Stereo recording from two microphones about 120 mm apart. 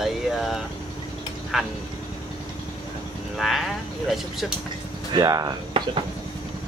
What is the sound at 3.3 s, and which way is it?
Speech, centre (ahead or behind).